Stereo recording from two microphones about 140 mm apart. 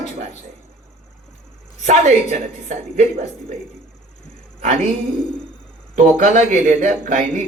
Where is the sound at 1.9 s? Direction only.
55° right (ahead or behind).